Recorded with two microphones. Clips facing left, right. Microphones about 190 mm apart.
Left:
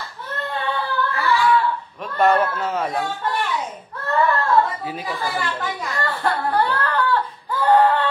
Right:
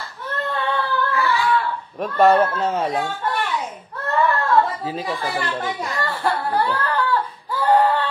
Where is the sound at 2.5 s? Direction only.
25° right (ahead or behind).